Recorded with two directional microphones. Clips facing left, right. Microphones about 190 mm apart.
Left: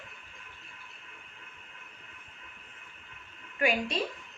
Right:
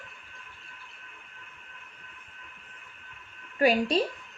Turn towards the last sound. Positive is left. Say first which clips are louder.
# right 6 dB
turn(degrees=-35)  # may be behind; listen again after turning